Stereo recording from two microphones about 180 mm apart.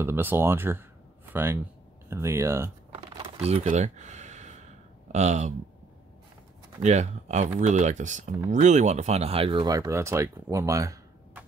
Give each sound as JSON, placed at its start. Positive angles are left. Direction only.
{"t": 0.0, "sound": "speech", "side_deg": -10}
{"t": 3.2, "sound": "a sound", "side_deg": -35}
{"t": 5.1, "sound": "speech", "side_deg": -40}
{"t": 6.8, "sound": "speech", "side_deg": -40}